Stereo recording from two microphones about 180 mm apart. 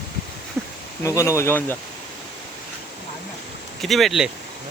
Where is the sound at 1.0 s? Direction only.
15° left (ahead or behind).